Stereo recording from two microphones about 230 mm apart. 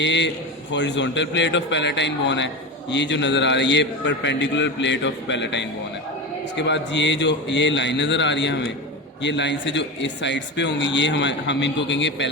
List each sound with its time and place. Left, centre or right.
0.0 s speech: left